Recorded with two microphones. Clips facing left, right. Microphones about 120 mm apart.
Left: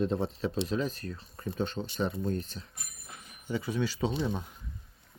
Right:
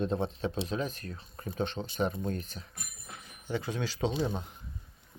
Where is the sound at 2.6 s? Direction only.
30° right (ahead or behind).